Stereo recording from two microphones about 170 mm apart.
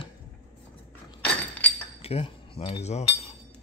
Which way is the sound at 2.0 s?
35° left (ahead or behind).